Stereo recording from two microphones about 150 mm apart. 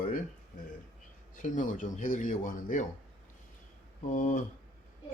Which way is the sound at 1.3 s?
60° left (ahead or behind).